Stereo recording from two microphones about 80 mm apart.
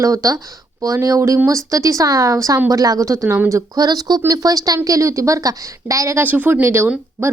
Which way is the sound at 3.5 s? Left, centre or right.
Right.